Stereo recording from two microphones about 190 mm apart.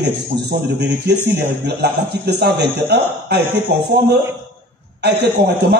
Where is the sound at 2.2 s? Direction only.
60° right (ahead or behind).